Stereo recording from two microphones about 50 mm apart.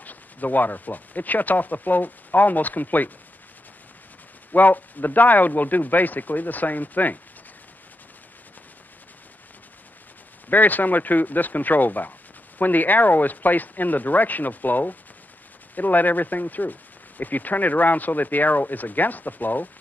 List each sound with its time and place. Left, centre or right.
0.0 s speech: left
4.5 s speech: left
10.5 s speech: left